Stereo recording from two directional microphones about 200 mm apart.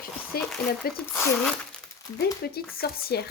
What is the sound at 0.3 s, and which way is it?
Speech, 50° left (ahead or behind).